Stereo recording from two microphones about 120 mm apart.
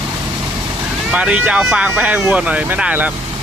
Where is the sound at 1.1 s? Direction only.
10° right (ahead or behind).